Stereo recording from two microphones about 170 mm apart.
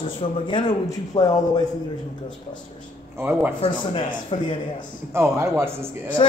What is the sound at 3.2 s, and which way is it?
Speech, 15° right (ahead or behind).